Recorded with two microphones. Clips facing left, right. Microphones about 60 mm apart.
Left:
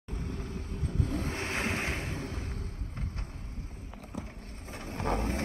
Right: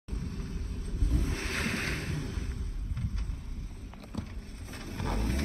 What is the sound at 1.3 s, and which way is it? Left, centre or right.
Boat, left.